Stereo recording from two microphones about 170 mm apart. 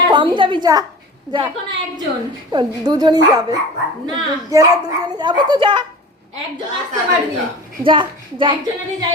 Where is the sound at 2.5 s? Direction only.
25° right (ahead or behind).